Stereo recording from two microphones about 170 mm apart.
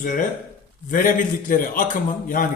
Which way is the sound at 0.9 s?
50° left (ahead or behind).